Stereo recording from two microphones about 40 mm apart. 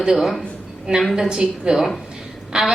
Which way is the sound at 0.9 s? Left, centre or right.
Centre.